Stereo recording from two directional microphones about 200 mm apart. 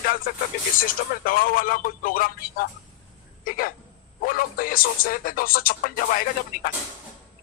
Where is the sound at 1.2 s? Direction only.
45° left (ahead or behind).